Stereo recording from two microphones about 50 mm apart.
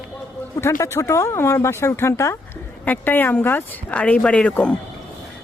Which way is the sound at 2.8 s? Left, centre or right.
Left.